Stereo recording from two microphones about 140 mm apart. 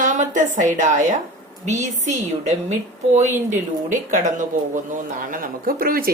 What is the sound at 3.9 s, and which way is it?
Speech, 65° right (ahead or behind).